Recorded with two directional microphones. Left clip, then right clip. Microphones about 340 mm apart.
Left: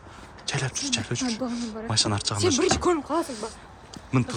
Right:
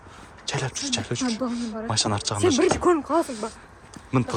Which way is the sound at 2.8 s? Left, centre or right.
Right.